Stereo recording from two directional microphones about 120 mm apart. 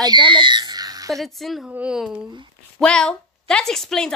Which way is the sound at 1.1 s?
Centre (ahead or behind).